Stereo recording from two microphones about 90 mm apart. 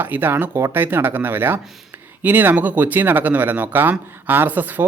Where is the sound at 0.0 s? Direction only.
20° right (ahead or behind).